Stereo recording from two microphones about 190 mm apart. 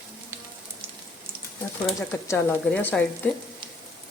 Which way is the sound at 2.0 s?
15° left (ahead or behind).